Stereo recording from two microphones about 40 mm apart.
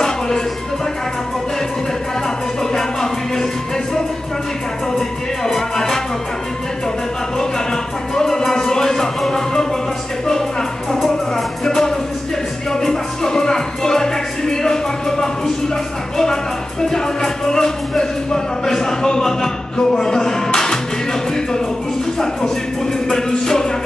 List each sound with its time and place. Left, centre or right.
2.7 s music: centre
4.9 s music: centre
8.1 s music: centre
11.6 s music: centre
16.9 s music: centre
23.3 s music: centre